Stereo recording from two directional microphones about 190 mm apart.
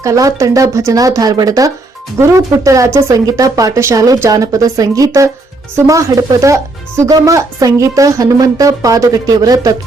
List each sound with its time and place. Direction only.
0.0 s speech: 15° right (ahead or behind)